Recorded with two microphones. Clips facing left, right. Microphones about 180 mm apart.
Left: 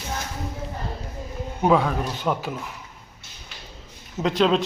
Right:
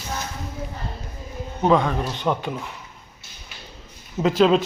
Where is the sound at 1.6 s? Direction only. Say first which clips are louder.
Right 1 dB; 5° left (ahead or behind).